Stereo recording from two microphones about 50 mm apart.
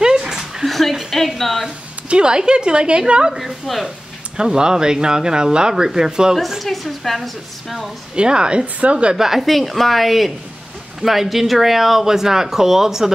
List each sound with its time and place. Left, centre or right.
0.0 s dog: centre
0.7 s speech: centre
2.0 s a woman's voice: centre
3.3 s speech: centre
4.4 s speech: centre
6.6 s speech: centre
8.2 s a woman's voice: centre
9.1 s speech: centre